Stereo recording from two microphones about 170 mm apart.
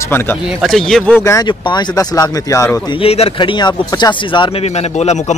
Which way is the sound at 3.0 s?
35° left (ahead or behind).